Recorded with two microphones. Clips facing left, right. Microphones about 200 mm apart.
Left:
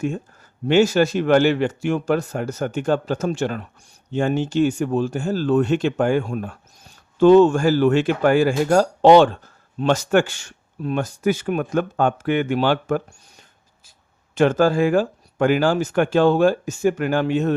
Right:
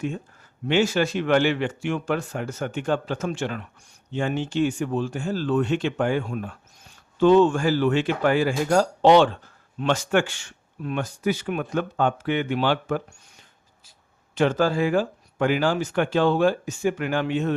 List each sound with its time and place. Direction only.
0.7 s speech: 40° left (ahead or behind)
14.3 s speech: 50° left (ahead or behind)